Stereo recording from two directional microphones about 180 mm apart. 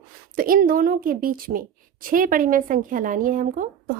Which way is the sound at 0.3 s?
50° right (ahead or behind).